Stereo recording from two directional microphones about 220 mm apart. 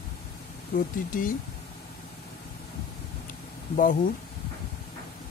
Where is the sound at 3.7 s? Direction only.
40° left (ahead or behind).